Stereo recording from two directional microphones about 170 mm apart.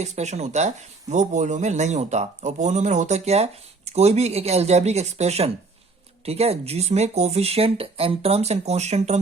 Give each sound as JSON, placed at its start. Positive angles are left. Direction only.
{"t": 0.0, "sound": "speech", "side_deg": -40}